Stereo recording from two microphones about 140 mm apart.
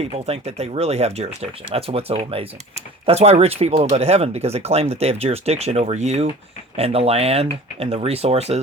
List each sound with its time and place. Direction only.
0.0 s speech: 45° right (ahead or behind)